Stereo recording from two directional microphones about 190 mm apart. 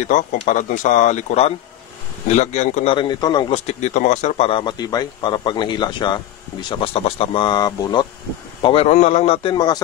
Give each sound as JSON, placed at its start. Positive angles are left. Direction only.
{"t": 0.1, "sound": "a man's voice", "side_deg": 40}
{"t": 8.6, "sound": "speech", "side_deg": 35}